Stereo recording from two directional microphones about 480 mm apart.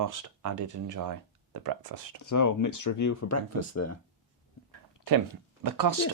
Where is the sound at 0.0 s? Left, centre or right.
Right.